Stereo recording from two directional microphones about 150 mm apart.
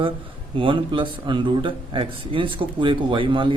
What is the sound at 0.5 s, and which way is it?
A man's voice, 35° right (ahead or behind).